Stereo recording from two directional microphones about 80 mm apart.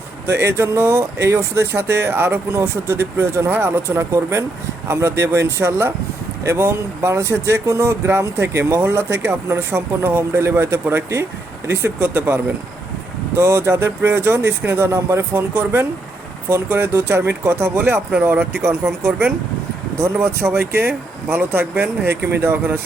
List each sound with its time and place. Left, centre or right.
0.3 s speech: right
3.5 s speech: right
3.9 s speech: right
15.3 s speech: right